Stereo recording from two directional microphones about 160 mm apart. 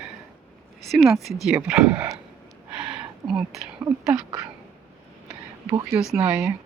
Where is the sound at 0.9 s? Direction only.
Centre (ahead or behind).